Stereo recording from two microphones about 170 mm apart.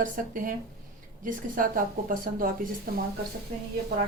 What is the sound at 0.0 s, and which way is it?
A woman's voice, 55° right (ahead or behind).